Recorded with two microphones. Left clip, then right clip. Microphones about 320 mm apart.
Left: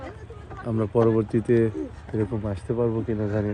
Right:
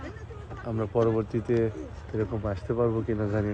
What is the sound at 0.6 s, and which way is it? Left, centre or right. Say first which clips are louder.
Speech: left 4 dB; left.